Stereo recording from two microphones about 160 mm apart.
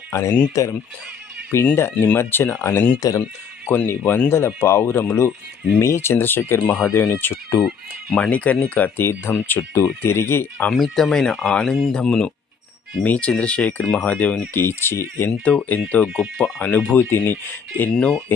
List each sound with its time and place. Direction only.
0.1 s speech: 15° left (ahead or behind)
3.7 s speech: 10° left (ahead or behind)
10.7 s speech: centre (ahead or behind)
16.0 s speech: 5° right (ahead or behind)
16.4 s speech: 10° left (ahead or behind)